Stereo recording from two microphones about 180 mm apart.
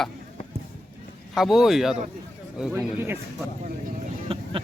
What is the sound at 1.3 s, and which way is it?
Speech, centre (ahead or behind).